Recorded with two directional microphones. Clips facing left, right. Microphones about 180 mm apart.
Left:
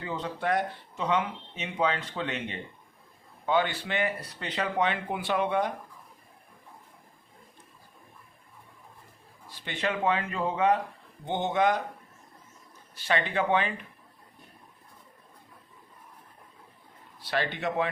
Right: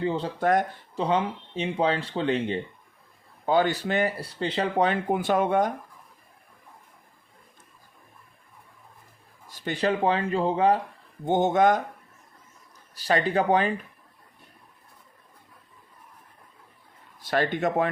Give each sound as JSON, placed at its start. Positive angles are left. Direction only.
{"t": 0.0, "sound": "speech", "side_deg": -30}
{"t": 0.3, "sound": "a man's voice", "side_deg": -45}
{"t": 0.9, "sound": "speech", "side_deg": -30}
{"t": 9.5, "sound": "speech", "side_deg": -45}
{"t": 11.3, "sound": "a man's voice", "side_deg": -45}
{"t": 13.0, "sound": "speech", "side_deg": -40}
{"t": 17.2, "sound": "a man's voice", "side_deg": -45}